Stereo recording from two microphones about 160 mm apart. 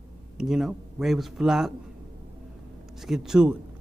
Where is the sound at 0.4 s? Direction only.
Centre (ahead or behind).